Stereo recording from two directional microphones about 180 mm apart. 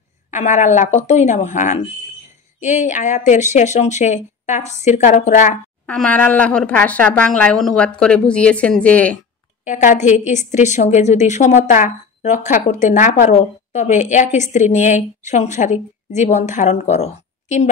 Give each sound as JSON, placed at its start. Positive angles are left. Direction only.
{"t": 0.3, "sound": "a woman's voice", "side_deg": 40}
{"t": 5.9, "sound": "a woman's voice", "side_deg": 5}
{"t": 9.7, "sound": "a woman's voice", "side_deg": 45}